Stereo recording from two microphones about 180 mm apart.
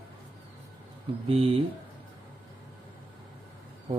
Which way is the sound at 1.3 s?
30° right (ahead or behind).